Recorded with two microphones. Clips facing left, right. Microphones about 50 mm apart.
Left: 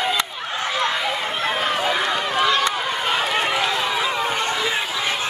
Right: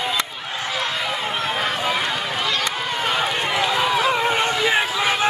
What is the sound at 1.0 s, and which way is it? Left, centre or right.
Run, centre.